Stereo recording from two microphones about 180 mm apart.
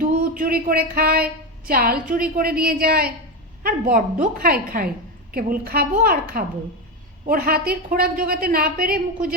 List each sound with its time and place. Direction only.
0.0 s a woman's voice: 50° right (ahead or behind)